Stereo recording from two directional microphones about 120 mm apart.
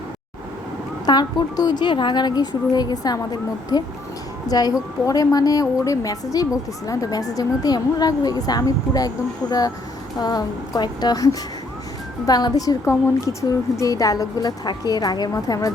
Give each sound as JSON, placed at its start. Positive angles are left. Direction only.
{"t": 1.0, "sound": "a woman's voice", "side_deg": 35}